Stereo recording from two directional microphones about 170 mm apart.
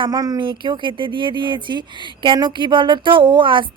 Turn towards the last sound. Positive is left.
turn(degrees=-30)  # may be behind; listen again after turning